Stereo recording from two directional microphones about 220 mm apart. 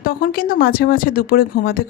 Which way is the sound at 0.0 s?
40° left (ahead or behind).